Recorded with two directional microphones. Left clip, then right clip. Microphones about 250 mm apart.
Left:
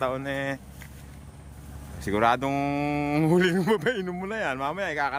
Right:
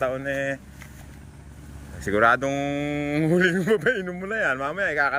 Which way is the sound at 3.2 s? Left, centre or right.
Centre.